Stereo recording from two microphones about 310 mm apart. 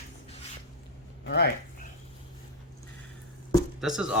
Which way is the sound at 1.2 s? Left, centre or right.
Left.